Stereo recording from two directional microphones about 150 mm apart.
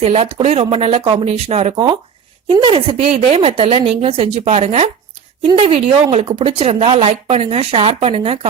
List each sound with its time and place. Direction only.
0.0 s speech: 45° right (ahead or behind)
1.7 s speech: 30° right (ahead or behind)